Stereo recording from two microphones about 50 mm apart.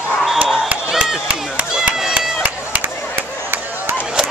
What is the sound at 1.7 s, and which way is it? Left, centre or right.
Run, centre.